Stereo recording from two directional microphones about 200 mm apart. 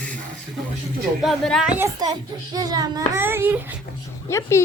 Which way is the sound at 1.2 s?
Centre (ahead or behind).